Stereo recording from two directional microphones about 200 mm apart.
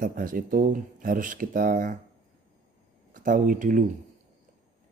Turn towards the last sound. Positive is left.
turn(degrees=-40)  # may be behind; listen again after turning